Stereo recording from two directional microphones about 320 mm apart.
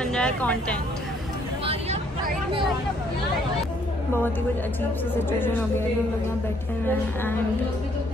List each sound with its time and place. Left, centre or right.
0.0 s a woman's voice: centre
1.7 s vehicle: centre
5.4 s a woman's voice: centre